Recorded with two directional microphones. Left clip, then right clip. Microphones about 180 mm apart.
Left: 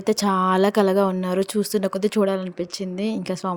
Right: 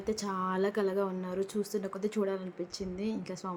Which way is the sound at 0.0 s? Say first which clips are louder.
Left 13 dB; 55° left (ahead or behind).